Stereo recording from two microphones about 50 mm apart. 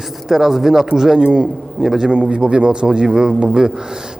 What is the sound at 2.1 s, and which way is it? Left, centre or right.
Speech, right.